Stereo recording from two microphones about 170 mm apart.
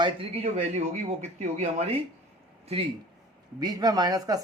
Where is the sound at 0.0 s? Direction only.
35° right (ahead or behind).